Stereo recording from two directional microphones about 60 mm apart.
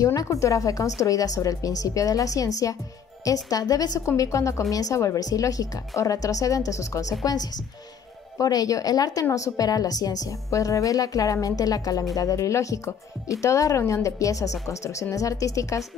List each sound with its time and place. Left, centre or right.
0.0 s speech: left
3.3 s a woman's voice: left
4.2 s speech: left
8.4 s a woman's voice: left
12.2 s speech: left